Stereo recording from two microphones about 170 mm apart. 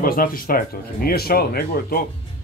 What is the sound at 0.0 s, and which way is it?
Speech, 55° left (ahead or behind).